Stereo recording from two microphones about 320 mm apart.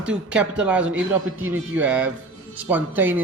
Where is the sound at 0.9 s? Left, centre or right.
Right.